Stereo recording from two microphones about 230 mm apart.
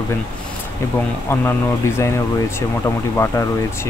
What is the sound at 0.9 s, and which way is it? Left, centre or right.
Speech, centre.